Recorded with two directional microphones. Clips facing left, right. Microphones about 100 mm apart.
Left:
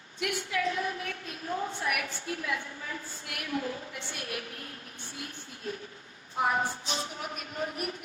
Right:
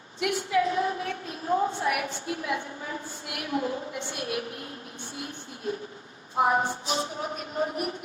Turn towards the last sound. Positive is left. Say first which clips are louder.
# right 5 dB
turn(degrees=-25)  # may be behind; listen again after turning